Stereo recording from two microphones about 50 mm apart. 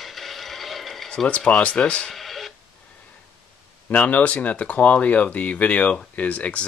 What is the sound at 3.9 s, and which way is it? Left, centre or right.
Speech, left.